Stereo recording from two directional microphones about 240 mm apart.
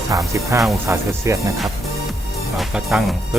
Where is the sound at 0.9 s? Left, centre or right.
Centre.